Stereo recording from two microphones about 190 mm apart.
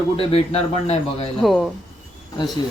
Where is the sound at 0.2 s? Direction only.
30° left (ahead or behind).